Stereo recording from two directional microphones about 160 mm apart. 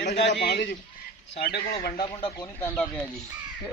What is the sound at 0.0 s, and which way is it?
A man's voice, 90° left.